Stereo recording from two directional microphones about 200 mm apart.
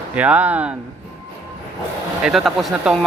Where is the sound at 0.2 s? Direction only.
5° right (ahead or behind).